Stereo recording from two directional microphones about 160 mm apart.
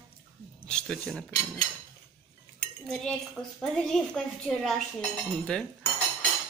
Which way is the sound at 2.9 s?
5° left (ahead or behind).